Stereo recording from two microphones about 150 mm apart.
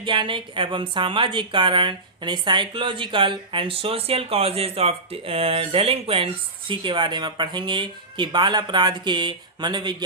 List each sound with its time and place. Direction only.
0.0 s speech: 35° right (ahead or behind)